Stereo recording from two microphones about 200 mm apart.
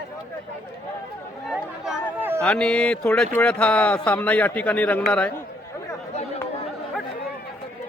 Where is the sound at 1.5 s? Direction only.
Centre (ahead or behind).